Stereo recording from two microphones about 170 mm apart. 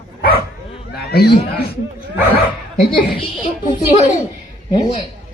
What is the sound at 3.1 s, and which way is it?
Speech, 40° left (ahead or behind).